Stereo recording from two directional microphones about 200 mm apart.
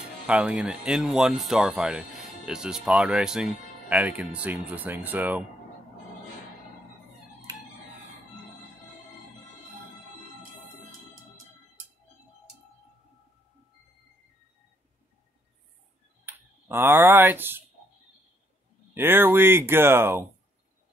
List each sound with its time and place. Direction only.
0.3 s speech: 5° right (ahead or behind)
7.5 s music: 15° right (ahead or behind)
16.3 s speech: 10° right (ahead or behind)
18.9 s speech: 10° right (ahead or behind)